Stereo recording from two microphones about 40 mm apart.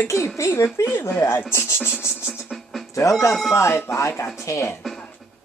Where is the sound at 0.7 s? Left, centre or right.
Left.